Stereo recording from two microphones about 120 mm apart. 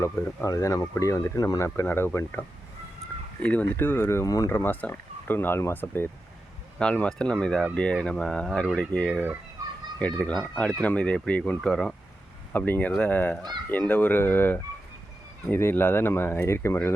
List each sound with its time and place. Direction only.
0.0 s speech: 25° left (ahead or behind)
3.4 s speech: 10° left (ahead or behind)
12.5 s speech: 15° left (ahead or behind)